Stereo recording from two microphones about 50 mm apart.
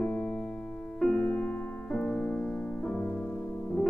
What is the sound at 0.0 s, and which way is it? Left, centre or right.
Keyboard, centre.